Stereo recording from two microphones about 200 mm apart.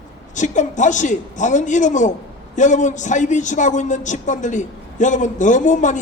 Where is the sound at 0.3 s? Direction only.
40° left (ahead or behind).